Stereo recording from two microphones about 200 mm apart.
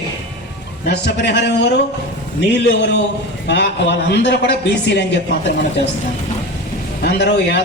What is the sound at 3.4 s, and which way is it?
A man's voice, 60° left (ahead or behind).